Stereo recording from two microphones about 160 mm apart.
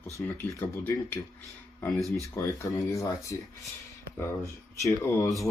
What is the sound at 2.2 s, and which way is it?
Speech, 20° left (ahead or behind).